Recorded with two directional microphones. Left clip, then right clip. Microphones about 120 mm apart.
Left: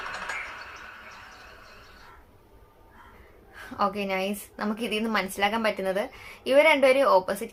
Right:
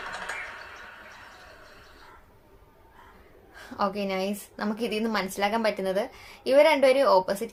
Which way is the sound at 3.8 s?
15° right (ahead or behind).